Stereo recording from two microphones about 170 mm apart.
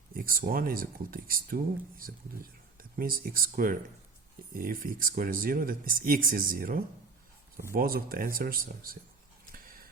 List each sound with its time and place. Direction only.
0.1 s speech: 60° right (ahead or behind)